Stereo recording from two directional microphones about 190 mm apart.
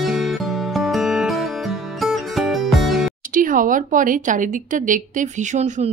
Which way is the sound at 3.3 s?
45° right (ahead or behind).